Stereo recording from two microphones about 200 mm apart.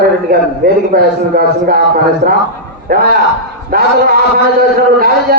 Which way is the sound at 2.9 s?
45° right (ahead or behind).